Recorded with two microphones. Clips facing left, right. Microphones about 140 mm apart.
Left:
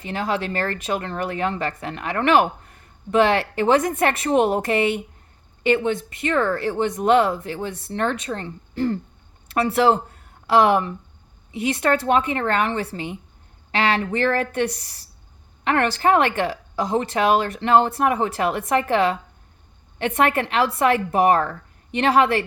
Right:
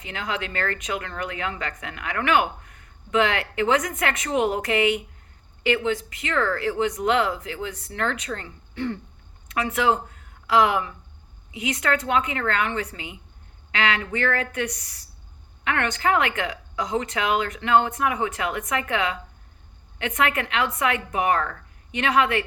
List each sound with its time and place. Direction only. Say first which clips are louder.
0.1 s a woman's voice: left 6 dB; 30° left (ahead or behind)
12.9 s speech: left 8 dB; 45° left (ahead or behind)